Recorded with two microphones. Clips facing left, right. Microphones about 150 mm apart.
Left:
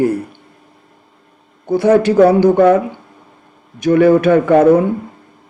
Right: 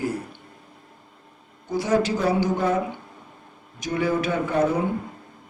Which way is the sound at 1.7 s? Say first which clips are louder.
Left 10 dB; 60° left (ahead or behind).